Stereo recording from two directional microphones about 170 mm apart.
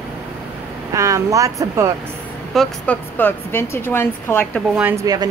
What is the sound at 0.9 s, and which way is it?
Speech, 20° right (ahead or behind).